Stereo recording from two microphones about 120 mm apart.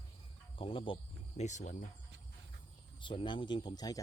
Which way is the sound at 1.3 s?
75° left (ahead or behind).